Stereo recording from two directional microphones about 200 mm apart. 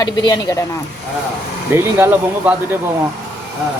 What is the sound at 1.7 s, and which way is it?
Speech, 10° right (ahead or behind).